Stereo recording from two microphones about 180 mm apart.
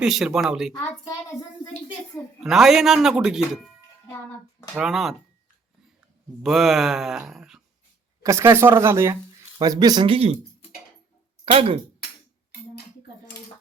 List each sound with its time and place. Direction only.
0.0 s speech: centre (ahead or behind)
2.4 s speech: centre (ahead or behind)
4.7 s speech: centre (ahead or behind)
6.4 s speech: centre (ahead or behind)
8.2 s speech: 15° right (ahead or behind); by 10.3 s 30° right (ahead or behind)
11.5 s speech: 35° right (ahead or behind)
12.5 s cutlery: 65° left (ahead or behind)